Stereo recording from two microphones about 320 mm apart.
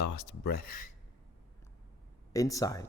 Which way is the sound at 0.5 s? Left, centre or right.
Left.